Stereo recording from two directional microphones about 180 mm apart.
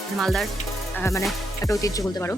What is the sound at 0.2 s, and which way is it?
Speech, centre (ahead or behind).